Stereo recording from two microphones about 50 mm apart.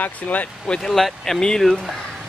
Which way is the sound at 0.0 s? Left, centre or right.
Left.